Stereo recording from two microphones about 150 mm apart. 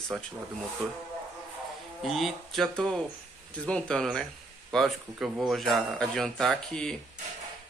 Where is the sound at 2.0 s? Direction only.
Centre (ahead or behind).